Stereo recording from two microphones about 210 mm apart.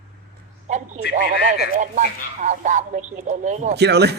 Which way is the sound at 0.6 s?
35° right (ahead or behind).